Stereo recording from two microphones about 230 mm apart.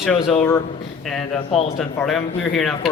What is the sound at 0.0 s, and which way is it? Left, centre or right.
Speech, centre.